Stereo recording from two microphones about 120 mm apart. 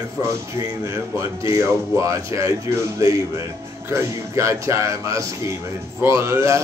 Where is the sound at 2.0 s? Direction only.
25° right (ahead or behind).